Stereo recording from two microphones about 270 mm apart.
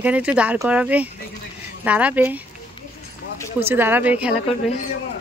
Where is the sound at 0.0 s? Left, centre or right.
Centre.